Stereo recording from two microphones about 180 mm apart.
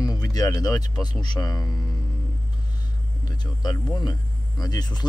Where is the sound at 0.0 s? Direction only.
20° left (ahead or behind).